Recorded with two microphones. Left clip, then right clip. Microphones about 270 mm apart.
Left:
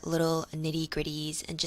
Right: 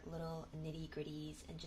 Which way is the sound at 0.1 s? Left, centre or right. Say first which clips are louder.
Left 19 dB; left.